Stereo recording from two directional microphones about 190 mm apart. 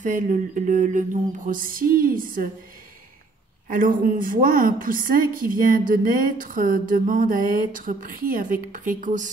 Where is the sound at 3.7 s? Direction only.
45° right (ahead or behind).